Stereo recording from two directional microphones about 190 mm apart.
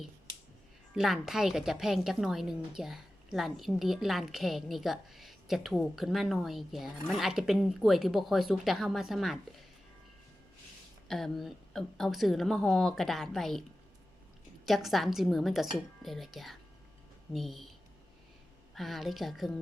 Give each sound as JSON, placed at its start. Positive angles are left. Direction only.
{"t": 0.9, "sound": "a woman's voice", "side_deg": 0}
{"t": 11.1, "sound": "a woman's voice", "side_deg": 0}
{"t": 14.7, "sound": "a woman's voice", "side_deg": 0}